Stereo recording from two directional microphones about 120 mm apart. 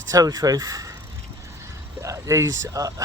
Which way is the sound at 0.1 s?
30° right (ahead or behind).